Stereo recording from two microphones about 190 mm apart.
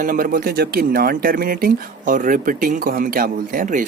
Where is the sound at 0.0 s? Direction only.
45° right (ahead or behind).